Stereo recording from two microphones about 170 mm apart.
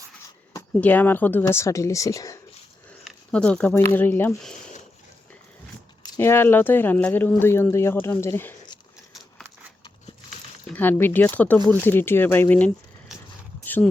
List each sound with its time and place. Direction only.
0.5 s speech: 10° left (ahead or behind)
3.0 s a sound: 5° left (ahead or behind)
3.8 s speech: 15° left (ahead or behind)
6.1 s speech: 15° left (ahead or behind)
10.7 s speech: 10° left (ahead or behind)